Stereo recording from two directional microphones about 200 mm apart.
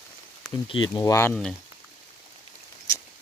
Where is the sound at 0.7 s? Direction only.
25° left (ahead or behind).